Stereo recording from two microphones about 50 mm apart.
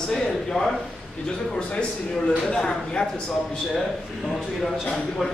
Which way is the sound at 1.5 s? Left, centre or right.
Left.